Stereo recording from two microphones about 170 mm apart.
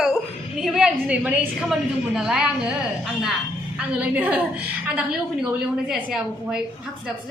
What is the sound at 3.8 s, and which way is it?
Speech, 10° right (ahead or behind).